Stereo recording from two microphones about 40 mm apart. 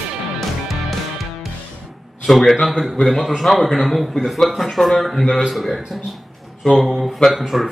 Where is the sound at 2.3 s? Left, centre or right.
Centre.